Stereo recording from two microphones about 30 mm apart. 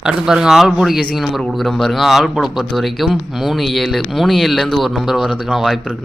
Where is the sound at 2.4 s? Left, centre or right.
Centre.